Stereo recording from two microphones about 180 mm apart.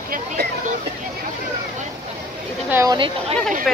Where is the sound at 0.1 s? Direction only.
50° right (ahead or behind).